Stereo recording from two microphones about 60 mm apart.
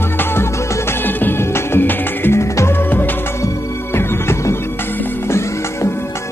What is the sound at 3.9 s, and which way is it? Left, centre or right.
Music, left.